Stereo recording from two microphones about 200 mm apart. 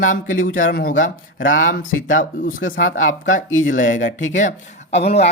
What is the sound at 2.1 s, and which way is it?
Speech, 45° left (ahead or behind).